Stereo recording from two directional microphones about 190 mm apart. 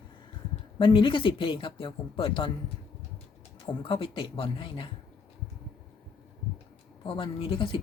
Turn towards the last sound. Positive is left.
turn(degrees=25)  # may be behind; listen again after turning